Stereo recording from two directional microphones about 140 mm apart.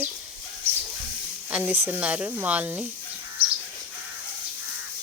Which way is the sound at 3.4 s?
40° right (ahead or behind).